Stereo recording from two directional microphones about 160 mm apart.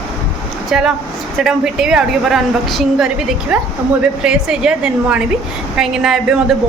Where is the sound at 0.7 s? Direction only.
5° right (ahead or behind).